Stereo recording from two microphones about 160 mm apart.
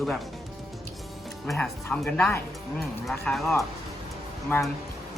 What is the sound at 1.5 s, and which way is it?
Speech, 5° left (ahead or behind).